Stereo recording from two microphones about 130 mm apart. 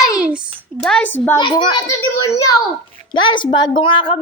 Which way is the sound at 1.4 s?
35° left (ahead or behind).